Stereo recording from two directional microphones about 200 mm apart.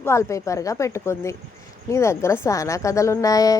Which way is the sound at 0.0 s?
15° left (ahead or behind).